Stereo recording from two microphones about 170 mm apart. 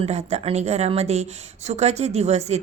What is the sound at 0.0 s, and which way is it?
A woman's voice, 40° right (ahead or behind).